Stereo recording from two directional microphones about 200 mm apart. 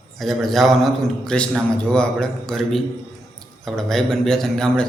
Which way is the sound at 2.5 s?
Centre (ahead or behind).